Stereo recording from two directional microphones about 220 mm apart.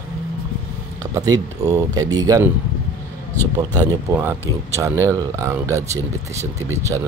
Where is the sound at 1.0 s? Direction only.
15° right (ahead or behind).